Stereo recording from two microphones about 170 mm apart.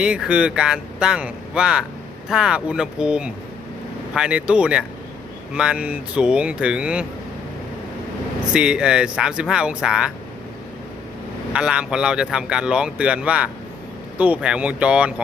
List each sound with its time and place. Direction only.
0.0 s speech: 5° right (ahead or behind)
8.5 s speech: 5° right (ahead or behind)
11.5 s speech: 5° right (ahead or behind)